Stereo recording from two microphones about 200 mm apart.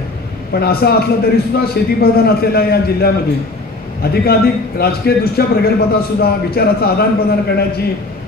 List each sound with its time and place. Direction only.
0.5 s a man's voice: 50° left (ahead or behind)